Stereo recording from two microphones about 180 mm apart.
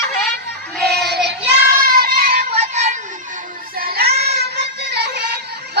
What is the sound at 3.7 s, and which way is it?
Music, 60° right (ahead or behind).